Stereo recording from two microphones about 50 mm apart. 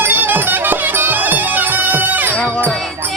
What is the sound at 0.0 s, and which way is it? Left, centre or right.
Bagpipes, right.